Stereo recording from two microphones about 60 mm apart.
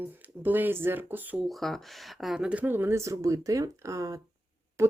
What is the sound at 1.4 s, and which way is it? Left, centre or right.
Speech, centre.